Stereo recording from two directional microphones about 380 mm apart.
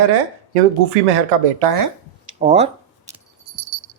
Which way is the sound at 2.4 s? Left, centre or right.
Centre.